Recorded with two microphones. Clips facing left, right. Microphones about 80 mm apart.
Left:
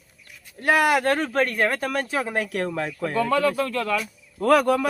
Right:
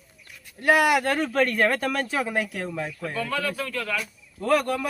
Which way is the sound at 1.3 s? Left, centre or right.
Left.